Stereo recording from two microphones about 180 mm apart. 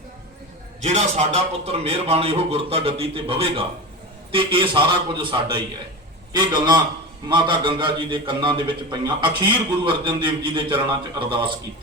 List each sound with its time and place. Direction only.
0.8 s a man's voice: 40° right (ahead or behind)